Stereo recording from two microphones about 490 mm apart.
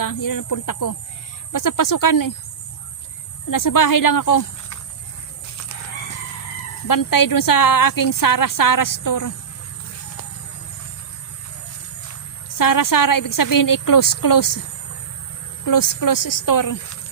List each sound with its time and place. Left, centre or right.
0.0 s a woman's voice: left
3.5 s a woman's voice: left
6.8 s a woman's voice: left
12.5 s a woman's voice: left
15.6 s a woman's voice: left